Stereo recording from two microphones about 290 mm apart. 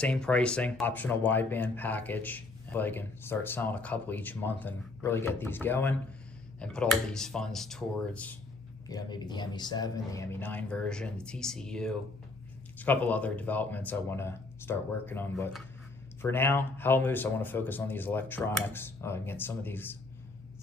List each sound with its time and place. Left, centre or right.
0.0 s a man's voice: centre